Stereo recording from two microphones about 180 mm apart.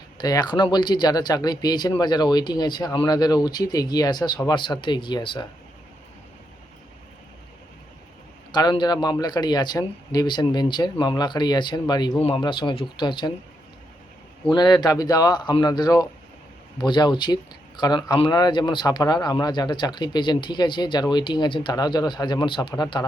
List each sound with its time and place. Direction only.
0.2 s speech: 20° left (ahead or behind)
8.5 s speech: 25° left (ahead or behind)
14.5 s speech: 25° left (ahead or behind)